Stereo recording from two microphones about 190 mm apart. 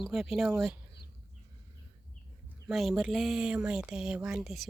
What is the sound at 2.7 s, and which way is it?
Speech, centre (ahead or behind).